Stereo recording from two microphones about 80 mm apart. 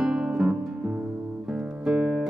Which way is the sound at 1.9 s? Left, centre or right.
Centre.